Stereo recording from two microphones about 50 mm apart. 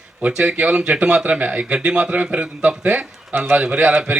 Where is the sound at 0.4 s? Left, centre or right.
Right.